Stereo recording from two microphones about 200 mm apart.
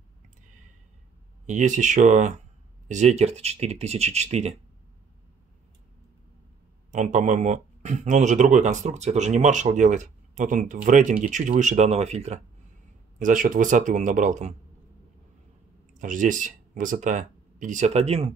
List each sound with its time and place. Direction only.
1.4 s speech: 40° right (ahead or behind)
6.9 s speech: 40° right (ahead or behind)
15.9 s speech: 40° right (ahead or behind)